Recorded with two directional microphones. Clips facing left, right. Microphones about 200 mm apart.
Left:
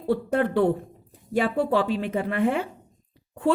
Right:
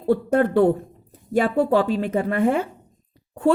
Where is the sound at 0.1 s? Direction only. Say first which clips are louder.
Right 4 dB; 45° right (ahead or behind).